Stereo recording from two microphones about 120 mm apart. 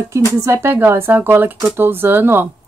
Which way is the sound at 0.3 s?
25° right (ahead or behind).